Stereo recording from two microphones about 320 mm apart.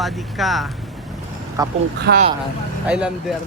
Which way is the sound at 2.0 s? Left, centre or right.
Right.